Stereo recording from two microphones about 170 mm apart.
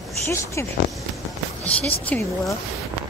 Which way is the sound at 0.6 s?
15° left (ahead or behind).